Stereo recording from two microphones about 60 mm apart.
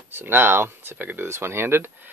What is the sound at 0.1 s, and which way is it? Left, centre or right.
Speech, right.